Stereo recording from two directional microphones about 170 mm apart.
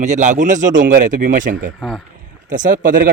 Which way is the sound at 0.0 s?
45° right (ahead or behind).